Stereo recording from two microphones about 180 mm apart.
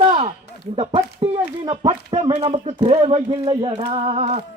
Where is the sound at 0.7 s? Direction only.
30° right (ahead or behind).